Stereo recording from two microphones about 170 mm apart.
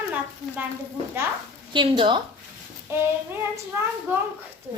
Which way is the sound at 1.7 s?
30° right (ahead or behind).